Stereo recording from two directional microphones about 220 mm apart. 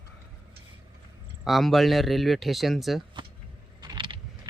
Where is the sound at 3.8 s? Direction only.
20° right (ahead or behind).